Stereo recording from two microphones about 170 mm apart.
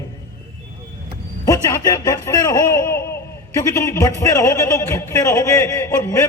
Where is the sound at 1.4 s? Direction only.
20° left (ahead or behind).